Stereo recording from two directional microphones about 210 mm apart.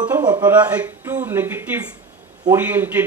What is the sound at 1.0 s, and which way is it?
Speech, 10° right (ahead or behind).